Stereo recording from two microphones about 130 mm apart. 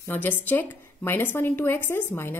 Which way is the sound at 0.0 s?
15° left (ahead or behind).